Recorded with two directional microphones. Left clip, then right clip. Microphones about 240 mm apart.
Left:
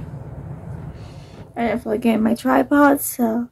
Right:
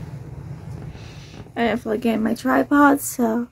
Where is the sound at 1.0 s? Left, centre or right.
Right.